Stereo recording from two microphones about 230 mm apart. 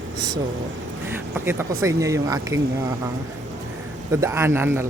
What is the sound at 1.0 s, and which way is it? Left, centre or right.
Speech, centre.